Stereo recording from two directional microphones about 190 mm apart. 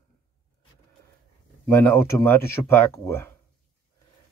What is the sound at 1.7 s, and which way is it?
Speech, 10° left (ahead or behind).